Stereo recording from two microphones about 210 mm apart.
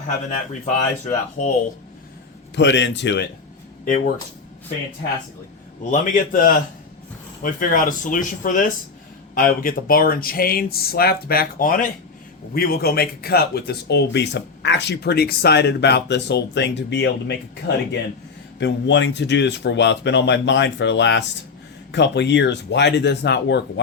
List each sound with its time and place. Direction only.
1.4 s speech: 40° left (ahead or behind)
2.6 s speech: 55° left (ahead or behind)
3.8 s speech: 40° left (ahead or behind)
5.8 s speech: 40° left (ahead or behind); by 23.8 s 55° left (ahead or behind)